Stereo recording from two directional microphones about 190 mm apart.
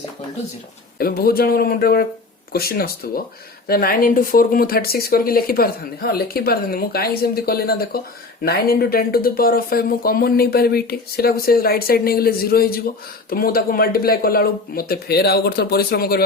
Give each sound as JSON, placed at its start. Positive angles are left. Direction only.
{"t": 0.9, "sound": "speech", "side_deg": 50}